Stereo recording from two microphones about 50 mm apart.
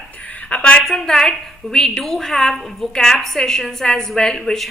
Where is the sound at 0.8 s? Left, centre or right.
Centre.